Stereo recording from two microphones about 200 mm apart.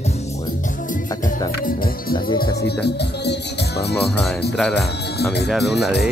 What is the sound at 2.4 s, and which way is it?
Music, 55° left (ahead or behind).